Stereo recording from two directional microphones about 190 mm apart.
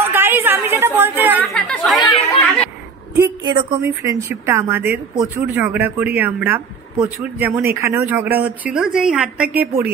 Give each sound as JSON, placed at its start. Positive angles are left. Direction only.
{"t": 0.0, "sound": "a sound", "side_deg": -10}
{"t": 1.5, "sound": "chatter", "side_deg": 5}
{"t": 3.4, "sound": "a woman's voice", "side_deg": -25}